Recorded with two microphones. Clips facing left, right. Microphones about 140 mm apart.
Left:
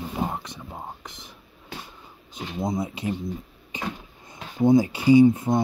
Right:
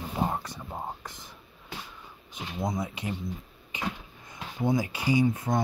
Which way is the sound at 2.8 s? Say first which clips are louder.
Left 5 dB; 30° left (ahead or behind).